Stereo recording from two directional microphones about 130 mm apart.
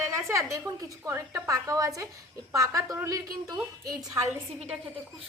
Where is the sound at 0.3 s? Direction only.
25° right (ahead or behind).